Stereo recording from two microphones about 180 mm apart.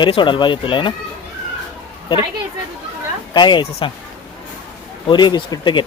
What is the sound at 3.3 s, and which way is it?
Speech, 25° left (ahead or behind).